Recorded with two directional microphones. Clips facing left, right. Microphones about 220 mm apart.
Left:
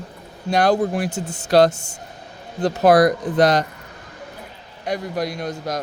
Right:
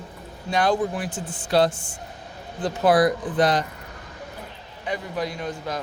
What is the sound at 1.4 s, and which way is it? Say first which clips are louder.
Speech: left 5 dB; 80° left.